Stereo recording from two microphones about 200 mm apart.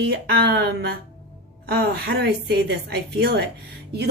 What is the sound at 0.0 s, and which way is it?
A woman's voice, 55° right (ahead or behind).